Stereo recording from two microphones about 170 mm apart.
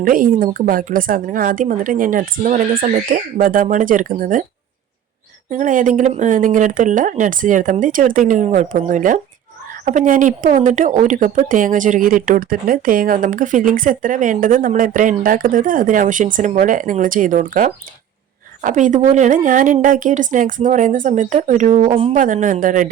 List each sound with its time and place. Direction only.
0.0 s speech: 55° right (ahead or behind)
5.5 s speech: 50° right (ahead or behind)